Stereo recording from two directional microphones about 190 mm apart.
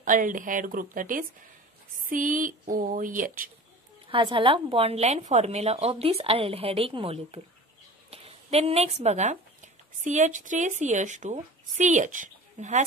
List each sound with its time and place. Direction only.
0.0 s speech: 45° right (ahead or behind)
4.1 s a woman's voice: 25° right (ahead or behind)